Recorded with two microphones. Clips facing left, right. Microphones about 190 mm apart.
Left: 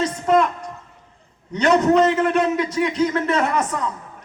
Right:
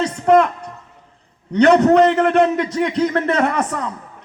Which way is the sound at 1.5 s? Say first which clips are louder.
Right 4 dB; 60° right (ahead or behind).